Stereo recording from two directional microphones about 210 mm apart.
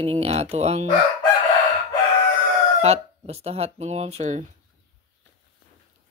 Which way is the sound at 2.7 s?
30° right (ahead or behind).